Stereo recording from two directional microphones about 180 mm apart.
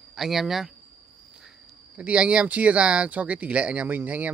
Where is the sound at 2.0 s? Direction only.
5° right (ahead or behind).